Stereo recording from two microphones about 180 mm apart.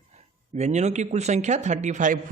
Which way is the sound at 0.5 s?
40° right (ahead or behind).